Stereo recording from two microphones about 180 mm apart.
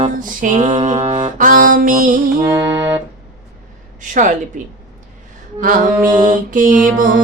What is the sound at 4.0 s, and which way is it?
Speech, 45° right (ahead or behind).